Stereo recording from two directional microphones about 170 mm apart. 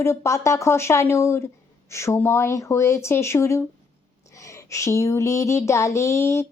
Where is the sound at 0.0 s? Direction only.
15° left (ahead or behind).